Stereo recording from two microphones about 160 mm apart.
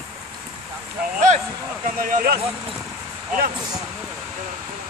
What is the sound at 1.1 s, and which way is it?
Speech, 50° right (ahead or behind).